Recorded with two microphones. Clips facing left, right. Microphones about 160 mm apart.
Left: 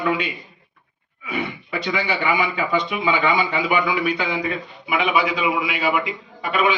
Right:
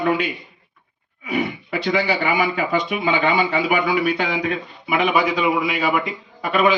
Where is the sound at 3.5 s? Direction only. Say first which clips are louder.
Right 2 dB; 40° right (ahead or behind).